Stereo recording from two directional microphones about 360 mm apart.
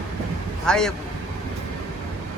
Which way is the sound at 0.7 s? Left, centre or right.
Centre.